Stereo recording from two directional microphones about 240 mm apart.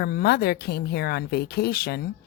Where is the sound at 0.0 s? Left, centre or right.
Left.